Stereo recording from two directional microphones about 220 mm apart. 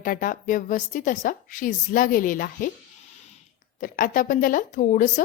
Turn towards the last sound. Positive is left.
turn(degrees=35)  # may be behind; listen again after turning